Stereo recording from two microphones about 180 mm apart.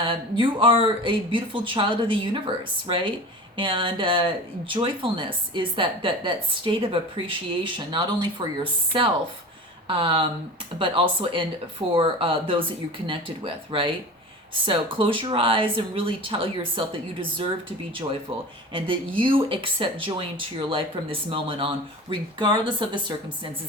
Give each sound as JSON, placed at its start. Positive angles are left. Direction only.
{"t": 0.0, "sound": "a woman's voice", "side_deg": -30}
{"t": 18.7, "sound": "a woman's voice", "side_deg": -30}